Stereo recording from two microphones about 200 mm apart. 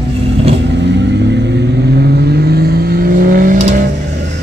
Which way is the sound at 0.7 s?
60° right (ahead or behind).